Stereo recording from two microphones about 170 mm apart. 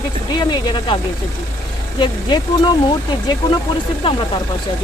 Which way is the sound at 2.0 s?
30° left (ahead or behind).